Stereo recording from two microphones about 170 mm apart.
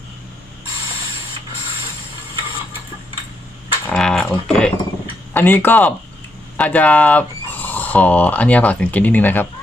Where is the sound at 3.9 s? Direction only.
5° left (ahead or behind).